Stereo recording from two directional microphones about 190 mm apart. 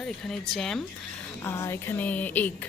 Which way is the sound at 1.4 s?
15° left (ahead or behind).